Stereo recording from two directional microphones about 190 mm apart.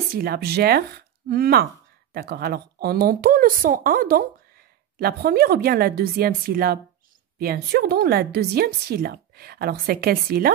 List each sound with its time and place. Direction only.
0.1 s a woman's voice: 55° right (ahead or behind)